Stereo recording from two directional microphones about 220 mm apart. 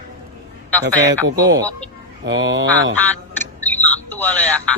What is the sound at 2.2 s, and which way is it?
Speech, 55° right (ahead or behind).